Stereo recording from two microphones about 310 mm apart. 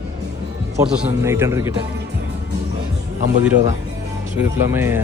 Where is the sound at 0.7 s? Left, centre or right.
Centre.